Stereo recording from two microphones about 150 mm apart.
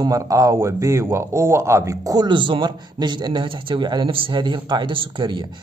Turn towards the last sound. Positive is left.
turn(degrees=-30)  # may be behind; listen again after turning